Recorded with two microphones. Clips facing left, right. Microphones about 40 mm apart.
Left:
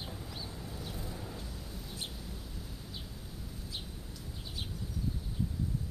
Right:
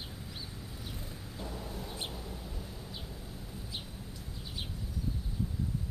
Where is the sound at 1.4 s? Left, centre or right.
Right.